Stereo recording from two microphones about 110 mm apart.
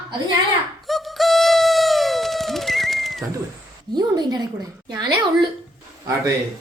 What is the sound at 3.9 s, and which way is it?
A child's voice, 40° right (ahead or behind).